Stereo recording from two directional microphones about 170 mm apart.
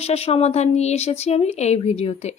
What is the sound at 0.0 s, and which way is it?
A woman's voice, 35° left (ahead or behind).